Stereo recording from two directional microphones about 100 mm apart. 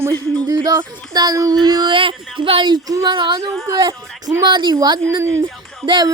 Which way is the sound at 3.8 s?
40° right (ahead or behind).